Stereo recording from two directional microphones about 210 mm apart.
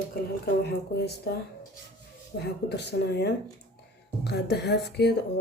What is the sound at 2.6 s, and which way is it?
Speech, 55° left (ahead or behind).